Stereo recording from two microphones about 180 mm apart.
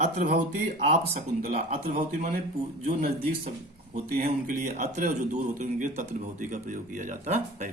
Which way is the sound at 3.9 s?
40° right (ahead or behind).